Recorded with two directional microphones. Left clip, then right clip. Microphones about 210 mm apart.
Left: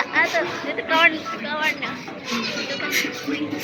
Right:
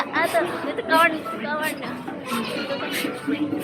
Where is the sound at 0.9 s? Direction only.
5° right (ahead or behind).